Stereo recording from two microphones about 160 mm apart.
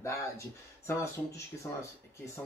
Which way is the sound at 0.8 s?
20° left (ahead or behind).